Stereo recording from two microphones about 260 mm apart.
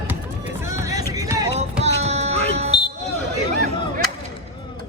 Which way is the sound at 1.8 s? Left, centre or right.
Right.